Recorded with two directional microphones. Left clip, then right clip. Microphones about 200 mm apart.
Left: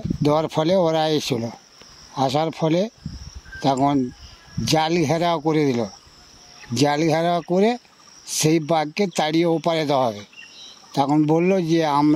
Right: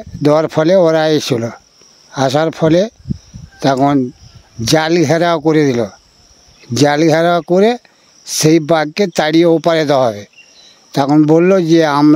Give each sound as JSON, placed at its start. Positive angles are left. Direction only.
{"t": 0.2, "sound": "speech", "side_deg": -50}